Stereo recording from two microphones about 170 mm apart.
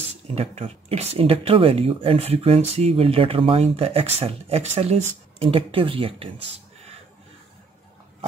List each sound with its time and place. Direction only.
0.3 s speech: 35° right (ahead or behind)